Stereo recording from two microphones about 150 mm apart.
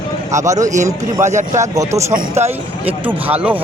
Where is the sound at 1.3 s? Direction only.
55° right (ahead or behind).